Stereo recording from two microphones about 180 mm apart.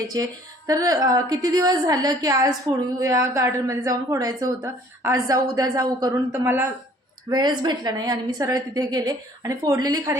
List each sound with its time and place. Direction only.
0.1 s a woman's voice: 20° right (ahead or behind)
7.3 s a woman's voice: 25° right (ahead or behind)